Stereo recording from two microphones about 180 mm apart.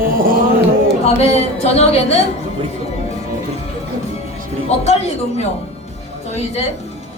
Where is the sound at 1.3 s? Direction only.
35° left (ahead or behind).